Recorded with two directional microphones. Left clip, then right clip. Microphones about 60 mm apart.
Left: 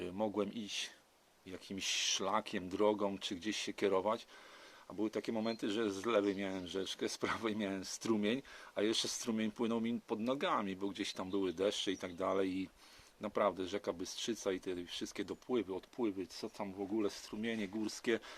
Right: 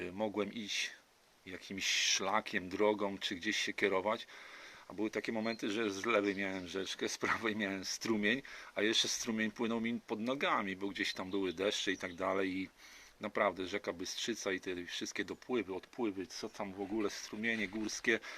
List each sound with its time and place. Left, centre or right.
0.2 s speech: left
7.8 s speech: left; by 15.8 s centre
16.0 s speech: centre
17.1 s speech: left